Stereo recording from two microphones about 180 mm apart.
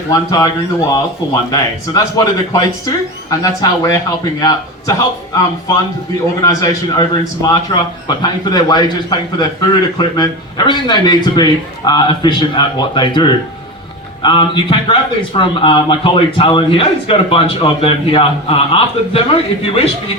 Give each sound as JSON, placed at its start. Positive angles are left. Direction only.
{"t": 0.1, "sound": "a man's voice", "side_deg": 20}
{"t": 6.4, "sound": "a man's voice", "side_deg": 20}